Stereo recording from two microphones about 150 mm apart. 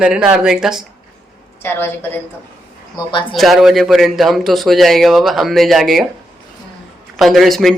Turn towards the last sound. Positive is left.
turn(degrees=0)  # may be behind; listen again after turning